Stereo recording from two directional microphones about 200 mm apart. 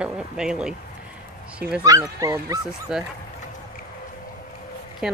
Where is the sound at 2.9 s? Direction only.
5° right (ahead or behind).